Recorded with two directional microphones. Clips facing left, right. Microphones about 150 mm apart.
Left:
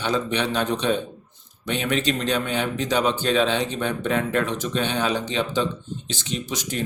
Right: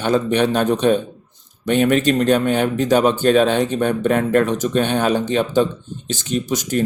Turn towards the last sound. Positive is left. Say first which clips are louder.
# right 8 dB
turn(degrees=-45)  # may be behind; listen again after turning